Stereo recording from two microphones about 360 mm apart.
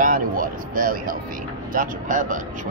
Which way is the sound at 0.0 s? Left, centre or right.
Right.